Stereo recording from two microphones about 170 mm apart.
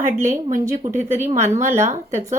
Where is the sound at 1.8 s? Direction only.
45° right (ahead or behind).